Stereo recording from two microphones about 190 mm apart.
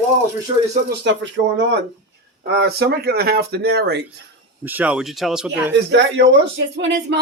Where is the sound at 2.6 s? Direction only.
55° right (ahead or behind).